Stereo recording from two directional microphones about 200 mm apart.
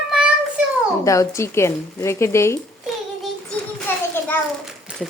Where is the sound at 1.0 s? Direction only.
15° left (ahead or behind).